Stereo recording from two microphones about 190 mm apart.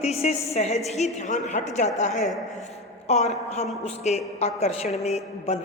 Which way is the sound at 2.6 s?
35° left (ahead or behind).